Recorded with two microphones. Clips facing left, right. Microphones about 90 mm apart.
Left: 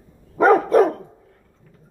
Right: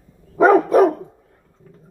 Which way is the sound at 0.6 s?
10° right (ahead or behind).